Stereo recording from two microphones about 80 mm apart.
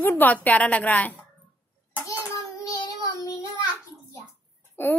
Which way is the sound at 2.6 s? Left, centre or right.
Left.